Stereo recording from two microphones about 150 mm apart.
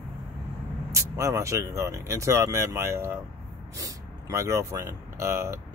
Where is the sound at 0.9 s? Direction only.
20° right (ahead or behind).